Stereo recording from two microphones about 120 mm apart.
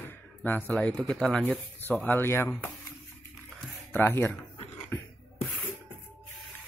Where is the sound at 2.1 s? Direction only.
20° left (ahead or behind).